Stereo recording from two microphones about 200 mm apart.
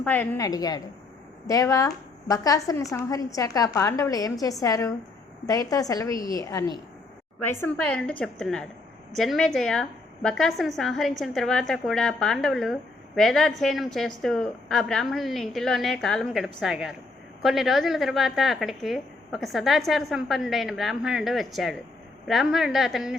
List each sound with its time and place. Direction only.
0.0 s a woman's voice: 10° left (ahead or behind)